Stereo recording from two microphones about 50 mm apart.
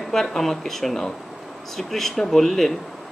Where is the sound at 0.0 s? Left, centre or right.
Centre.